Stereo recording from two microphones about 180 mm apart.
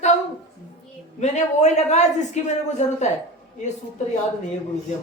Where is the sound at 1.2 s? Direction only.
40° left (ahead or behind).